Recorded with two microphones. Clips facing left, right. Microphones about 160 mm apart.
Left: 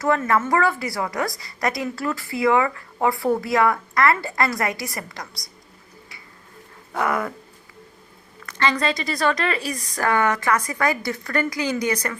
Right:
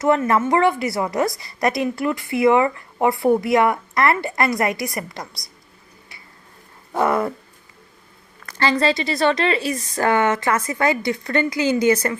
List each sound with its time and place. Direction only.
0.0 s speech: 20° right (ahead or behind)
6.9 s speech: 30° right (ahead or behind)
8.4 s speech: 30° right (ahead or behind)